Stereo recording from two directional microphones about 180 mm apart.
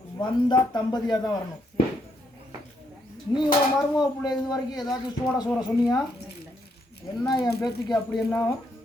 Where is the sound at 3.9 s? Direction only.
20° left (ahead or behind).